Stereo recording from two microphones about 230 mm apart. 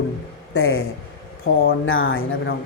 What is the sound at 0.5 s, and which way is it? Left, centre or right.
Speech, left.